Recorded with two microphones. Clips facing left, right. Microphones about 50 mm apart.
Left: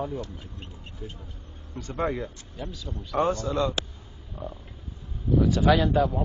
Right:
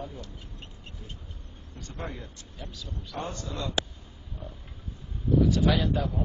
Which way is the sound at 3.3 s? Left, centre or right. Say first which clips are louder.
Left 9 dB; left.